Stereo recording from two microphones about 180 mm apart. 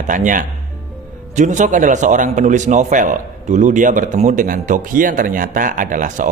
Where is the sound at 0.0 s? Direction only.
45° right (ahead or behind).